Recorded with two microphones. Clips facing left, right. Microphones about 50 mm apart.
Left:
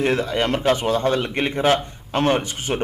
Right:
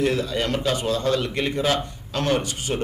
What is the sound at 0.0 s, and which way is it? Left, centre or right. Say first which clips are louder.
Speech: left 2 dB; left.